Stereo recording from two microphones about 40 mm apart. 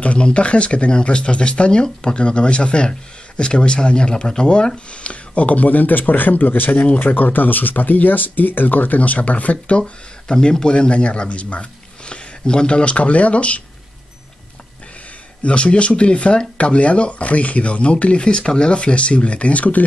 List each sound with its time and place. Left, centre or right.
0.0 s speech: left
9.8 s speech: centre
15.4 s speech: left